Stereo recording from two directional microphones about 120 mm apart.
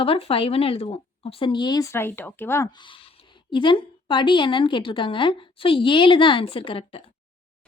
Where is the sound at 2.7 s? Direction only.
45° left (ahead or behind).